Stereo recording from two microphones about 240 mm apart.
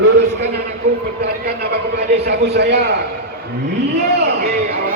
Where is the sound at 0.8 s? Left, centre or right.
Right.